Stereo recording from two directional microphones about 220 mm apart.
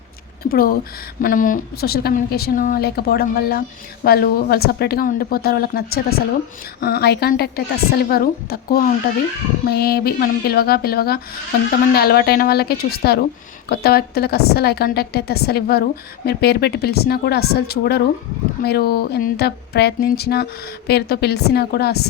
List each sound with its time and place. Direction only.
0.4 s speech: 40° left (ahead or behind)